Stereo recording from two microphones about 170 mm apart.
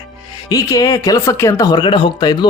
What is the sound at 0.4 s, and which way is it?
Speech, 20° left (ahead or behind).